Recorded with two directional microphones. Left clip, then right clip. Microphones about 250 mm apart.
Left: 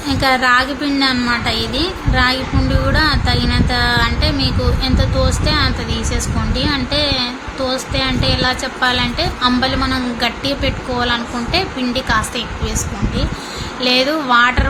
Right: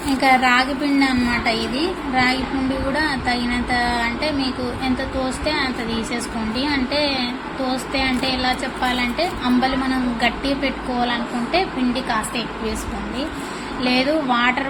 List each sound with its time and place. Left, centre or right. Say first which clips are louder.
0.2 s a woman's voice: left 2 dB; centre
13.8 s a woman's voice: left 4 dB; centre